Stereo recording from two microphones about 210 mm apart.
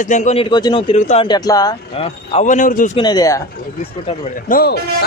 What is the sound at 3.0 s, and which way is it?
Speech, 20° left (ahead or behind).